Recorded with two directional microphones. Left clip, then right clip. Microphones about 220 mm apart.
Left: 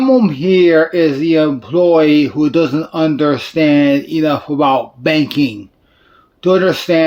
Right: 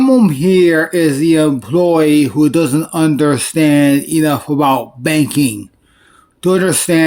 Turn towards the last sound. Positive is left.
turn(degrees=-50)  # may be behind; listen again after turning